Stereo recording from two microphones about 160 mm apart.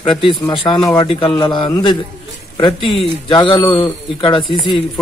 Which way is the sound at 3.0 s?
30° left (ahead or behind).